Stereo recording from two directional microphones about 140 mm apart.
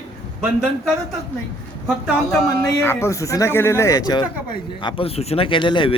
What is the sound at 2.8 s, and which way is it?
Speech, 15° left (ahead or behind).